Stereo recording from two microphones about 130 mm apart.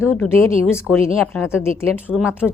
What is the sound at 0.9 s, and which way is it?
Speech, centre (ahead or behind).